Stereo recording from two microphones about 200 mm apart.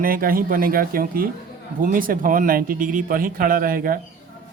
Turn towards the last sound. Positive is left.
turn(degrees=-45)  # may be behind; listen again after turning